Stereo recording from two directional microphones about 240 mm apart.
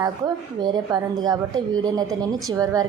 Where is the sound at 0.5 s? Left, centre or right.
Centre.